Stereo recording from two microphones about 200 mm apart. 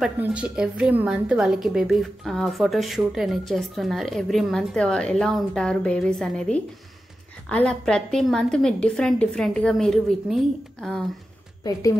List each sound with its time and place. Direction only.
0.0 s a woman's voice: 5° right (ahead or behind)